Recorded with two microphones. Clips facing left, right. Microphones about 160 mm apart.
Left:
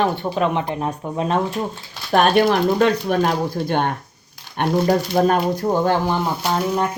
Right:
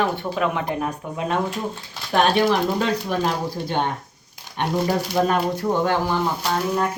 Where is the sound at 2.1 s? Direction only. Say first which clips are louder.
Left 3 dB; 55° left (ahead or behind).